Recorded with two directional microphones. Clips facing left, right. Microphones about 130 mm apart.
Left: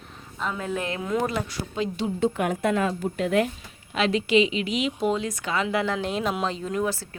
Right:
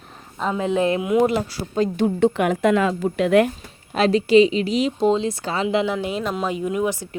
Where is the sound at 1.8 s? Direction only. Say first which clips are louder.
Right 7 dB; 50° right (ahead or behind).